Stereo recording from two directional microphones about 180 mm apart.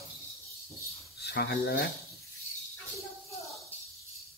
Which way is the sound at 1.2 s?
70° left (ahead or behind).